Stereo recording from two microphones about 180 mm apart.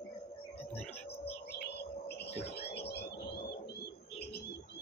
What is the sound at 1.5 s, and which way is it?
Bird, 60° left (ahead or behind).